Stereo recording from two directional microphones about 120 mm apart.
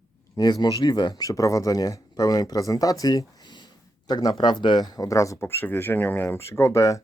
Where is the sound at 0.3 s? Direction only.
35° left (ahead or behind).